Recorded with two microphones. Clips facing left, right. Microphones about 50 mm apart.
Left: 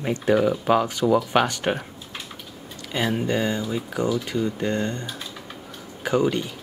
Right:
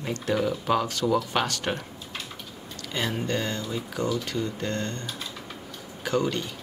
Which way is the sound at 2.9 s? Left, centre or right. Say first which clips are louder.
Left 5 dB; centre.